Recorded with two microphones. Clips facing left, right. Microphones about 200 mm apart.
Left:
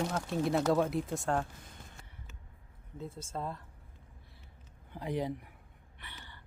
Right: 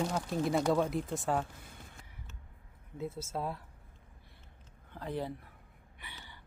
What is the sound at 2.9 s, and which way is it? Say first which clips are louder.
Speech: right 3 dB; 5° right (ahead or behind).